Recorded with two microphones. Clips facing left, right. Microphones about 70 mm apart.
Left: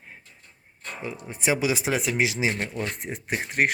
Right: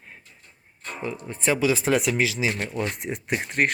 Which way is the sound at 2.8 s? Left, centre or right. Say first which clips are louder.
Right 3 dB; centre.